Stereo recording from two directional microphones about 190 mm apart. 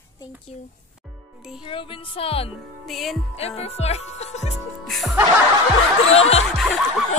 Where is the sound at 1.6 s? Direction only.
25° left (ahead or behind).